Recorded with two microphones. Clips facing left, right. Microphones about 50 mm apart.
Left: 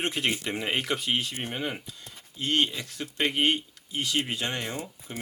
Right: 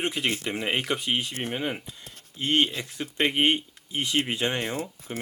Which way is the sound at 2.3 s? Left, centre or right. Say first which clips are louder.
Right 2 dB; right.